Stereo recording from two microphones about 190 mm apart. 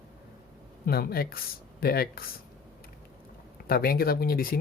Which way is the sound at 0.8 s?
55° left (ahead or behind).